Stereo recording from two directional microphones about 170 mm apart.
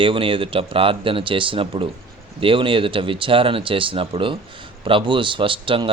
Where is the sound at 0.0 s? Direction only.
30° right (ahead or behind).